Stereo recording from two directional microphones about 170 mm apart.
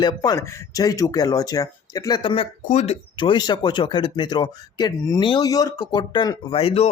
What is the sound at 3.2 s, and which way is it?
Speech, 25° left (ahead or behind).